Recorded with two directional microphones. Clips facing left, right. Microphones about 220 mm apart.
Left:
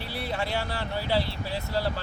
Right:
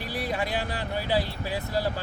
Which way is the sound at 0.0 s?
15° right (ahead or behind).